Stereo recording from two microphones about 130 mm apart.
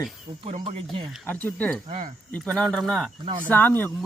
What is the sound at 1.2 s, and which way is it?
Speech, 10° left (ahead or behind).